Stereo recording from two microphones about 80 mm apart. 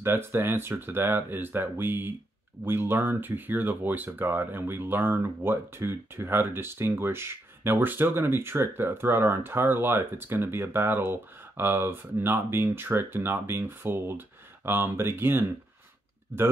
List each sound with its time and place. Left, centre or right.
0.0 s speech: right